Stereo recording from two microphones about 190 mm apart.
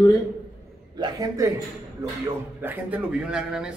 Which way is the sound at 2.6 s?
5° right (ahead or behind).